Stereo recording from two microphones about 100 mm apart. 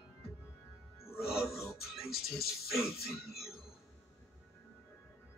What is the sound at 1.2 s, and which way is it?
Speech, centre (ahead or behind).